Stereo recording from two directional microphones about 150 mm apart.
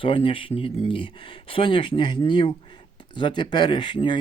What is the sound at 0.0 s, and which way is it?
Speech, 35° left (ahead or behind).